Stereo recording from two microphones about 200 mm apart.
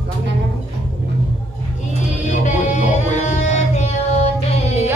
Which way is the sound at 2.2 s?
35° left (ahead or behind).